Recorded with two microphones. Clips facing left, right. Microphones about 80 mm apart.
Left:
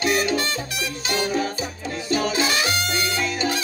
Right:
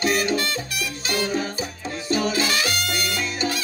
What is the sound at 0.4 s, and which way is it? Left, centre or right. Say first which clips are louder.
Music: left 1 dB; left.